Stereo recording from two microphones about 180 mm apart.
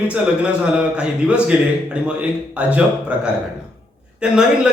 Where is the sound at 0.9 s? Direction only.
5° right (ahead or behind).